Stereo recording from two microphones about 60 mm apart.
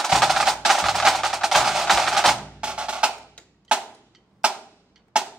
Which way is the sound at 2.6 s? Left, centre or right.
Centre.